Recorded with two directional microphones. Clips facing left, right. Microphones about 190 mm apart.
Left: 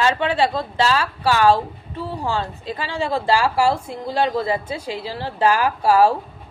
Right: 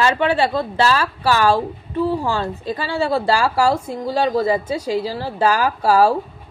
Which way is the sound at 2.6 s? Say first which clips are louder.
Right 4 dB; 40° right (ahead or behind).